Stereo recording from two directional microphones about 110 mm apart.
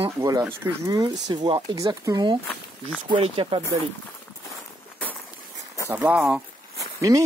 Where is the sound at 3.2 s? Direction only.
60° right (ahead or behind).